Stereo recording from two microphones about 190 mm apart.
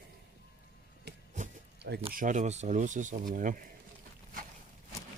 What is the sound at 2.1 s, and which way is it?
Speech, 45° right (ahead or behind).